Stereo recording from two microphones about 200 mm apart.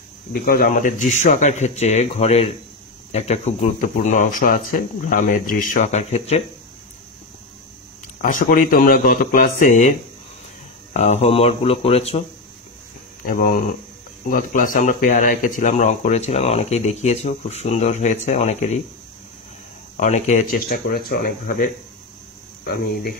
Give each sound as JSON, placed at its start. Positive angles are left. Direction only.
{"t": 0.3, "sound": "speech", "side_deg": 45}
{"t": 8.2, "sound": "speech", "side_deg": 40}
{"t": 13.2, "sound": "speech", "side_deg": 45}
{"t": 20.0, "sound": "speech", "side_deg": 35}
{"t": 22.7, "sound": "speech", "side_deg": 45}